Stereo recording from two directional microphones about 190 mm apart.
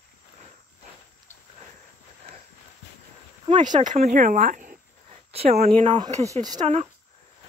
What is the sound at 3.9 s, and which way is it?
Speech, 45° right (ahead or behind).